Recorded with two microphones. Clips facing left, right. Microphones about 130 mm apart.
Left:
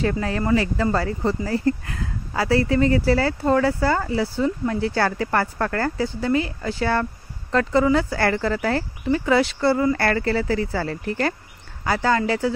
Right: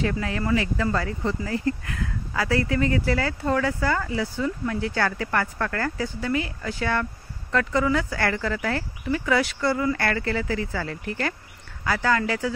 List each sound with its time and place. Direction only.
0.0 s speech: 35° left (ahead or behind)